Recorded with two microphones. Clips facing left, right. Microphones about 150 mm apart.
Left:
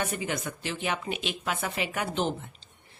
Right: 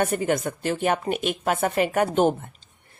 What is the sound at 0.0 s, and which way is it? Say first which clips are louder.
Speech: right 8 dB; 50° right (ahead or behind).